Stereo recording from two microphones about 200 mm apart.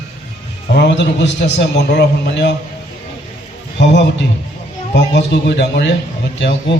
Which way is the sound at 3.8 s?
60° left (ahead or behind).